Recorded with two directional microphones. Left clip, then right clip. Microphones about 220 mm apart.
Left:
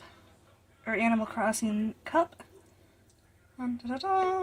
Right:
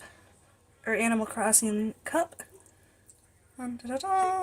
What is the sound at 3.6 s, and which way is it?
Speech, 25° right (ahead or behind).